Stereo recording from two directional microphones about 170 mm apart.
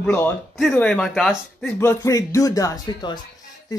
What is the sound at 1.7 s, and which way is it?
Speech, 15° left (ahead or behind).